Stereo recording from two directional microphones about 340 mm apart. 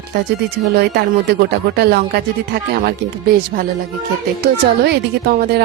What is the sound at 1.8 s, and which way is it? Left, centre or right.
Speech, right.